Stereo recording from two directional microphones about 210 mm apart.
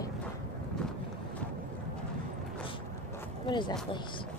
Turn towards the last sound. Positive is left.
turn(degrees=20)  # may be behind; listen again after turning